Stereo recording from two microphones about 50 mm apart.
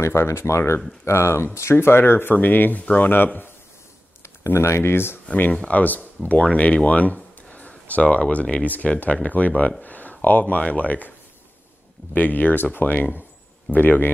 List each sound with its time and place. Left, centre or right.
0.0 s speech: left
2.3 s speech: left
4.6 s speech: left
5.3 s speech: left
7.4 s a sound: left
8.3 s speech: left
9.8 s a sound: left
10.7 s speech: left